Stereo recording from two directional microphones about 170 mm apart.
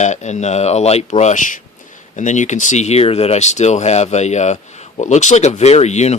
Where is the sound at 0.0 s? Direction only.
45° left (ahead or behind).